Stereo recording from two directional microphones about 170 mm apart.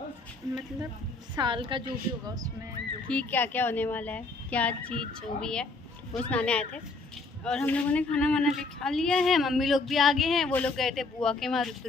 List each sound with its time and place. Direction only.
1.3 s a woman's voice: 30° right (ahead or behind)
3.1 s a woman's voice: 10° left (ahead or behind)